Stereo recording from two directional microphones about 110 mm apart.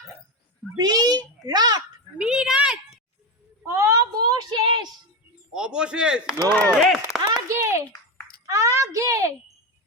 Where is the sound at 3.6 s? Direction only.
25° right (ahead or behind).